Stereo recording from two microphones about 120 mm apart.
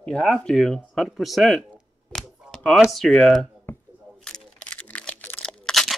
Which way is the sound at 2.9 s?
5° left (ahead or behind).